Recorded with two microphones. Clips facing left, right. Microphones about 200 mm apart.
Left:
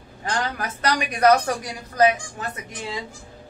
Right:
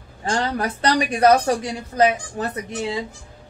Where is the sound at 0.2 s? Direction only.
30° right (ahead or behind).